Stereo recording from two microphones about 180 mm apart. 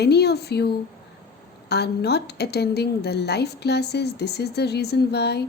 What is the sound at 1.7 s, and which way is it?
Speech, 65° left (ahead or behind).